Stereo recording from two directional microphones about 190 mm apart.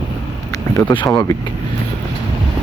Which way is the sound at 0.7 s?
20° left (ahead or behind).